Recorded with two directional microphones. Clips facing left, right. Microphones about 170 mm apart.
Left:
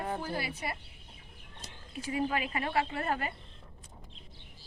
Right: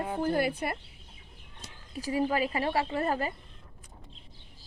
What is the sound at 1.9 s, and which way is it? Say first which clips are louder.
Speech: right 4 dB; 35° right (ahead or behind).